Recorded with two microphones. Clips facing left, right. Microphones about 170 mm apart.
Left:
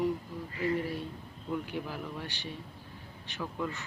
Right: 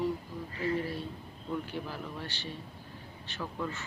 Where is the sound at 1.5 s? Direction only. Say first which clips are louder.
Left 1 dB; 10° left (ahead or behind).